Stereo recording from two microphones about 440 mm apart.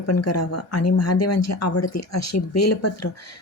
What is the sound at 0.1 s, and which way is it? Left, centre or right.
Speech, left.